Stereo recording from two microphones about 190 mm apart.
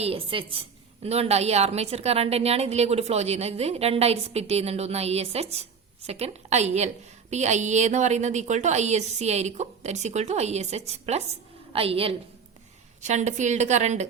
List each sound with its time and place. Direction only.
0.0 s a woman's voice: 30° right (ahead or behind)